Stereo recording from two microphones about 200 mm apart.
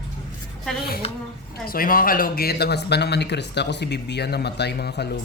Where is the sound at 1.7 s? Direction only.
45° left (ahead or behind).